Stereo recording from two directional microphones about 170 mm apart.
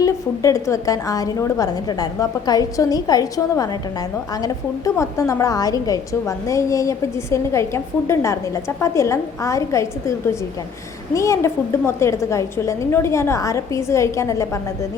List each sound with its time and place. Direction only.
0.0 s a woman's voice: 20° left (ahead or behind)
4.9 s a woman's voice: 15° left (ahead or behind)